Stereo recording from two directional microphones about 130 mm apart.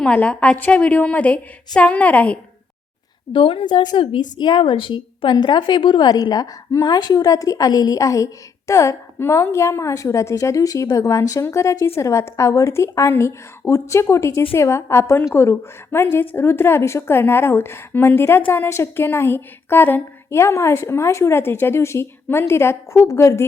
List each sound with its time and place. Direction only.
0.0 s a woman's voice: 10° left (ahead or behind)
3.3 s a woman's voice: 40° left (ahead or behind); by 23.5 s 20° left (ahead or behind)